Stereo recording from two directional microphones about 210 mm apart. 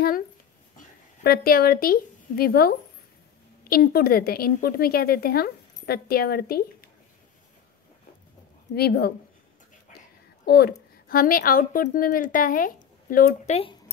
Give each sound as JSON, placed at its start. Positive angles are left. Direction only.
{"t": 0.7, "sound": "a woman's voice", "side_deg": 45}
{"t": 8.7, "sound": "a woman's voice", "side_deg": 50}
{"t": 10.4, "sound": "a woman's voice", "side_deg": 50}